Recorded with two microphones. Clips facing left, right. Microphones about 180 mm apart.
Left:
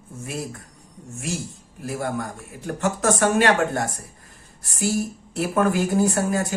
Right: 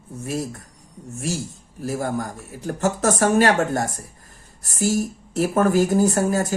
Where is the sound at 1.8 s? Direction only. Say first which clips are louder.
Right 2 dB; 35° right (ahead or behind).